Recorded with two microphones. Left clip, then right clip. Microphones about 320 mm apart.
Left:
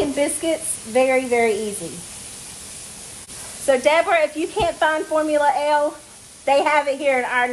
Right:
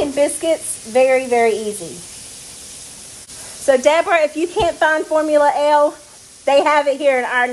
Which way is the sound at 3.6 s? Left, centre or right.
Right.